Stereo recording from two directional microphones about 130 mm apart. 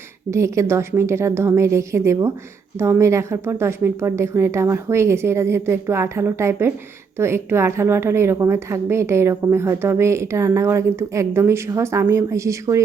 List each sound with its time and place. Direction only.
0.3 s a woman's voice: 20° right (ahead or behind)